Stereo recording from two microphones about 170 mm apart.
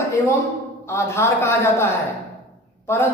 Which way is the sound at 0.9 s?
15° left (ahead or behind).